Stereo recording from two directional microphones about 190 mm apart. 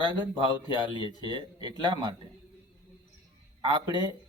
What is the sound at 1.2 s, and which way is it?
Speech, 25° right (ahead or behind).